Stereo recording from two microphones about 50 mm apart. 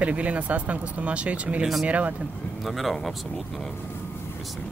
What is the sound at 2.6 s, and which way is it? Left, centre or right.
Speech, centre.